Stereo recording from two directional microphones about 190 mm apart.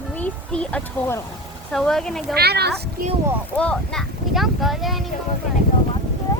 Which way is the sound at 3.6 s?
5° left (ahead or behind).